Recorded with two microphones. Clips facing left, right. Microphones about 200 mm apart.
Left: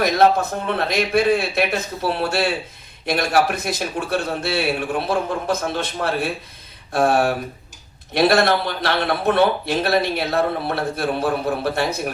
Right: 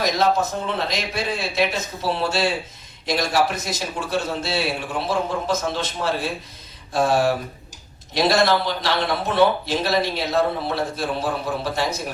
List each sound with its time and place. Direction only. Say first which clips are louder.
0.0 s a man's voice: left 4 dB; 60° left (ahead or behind)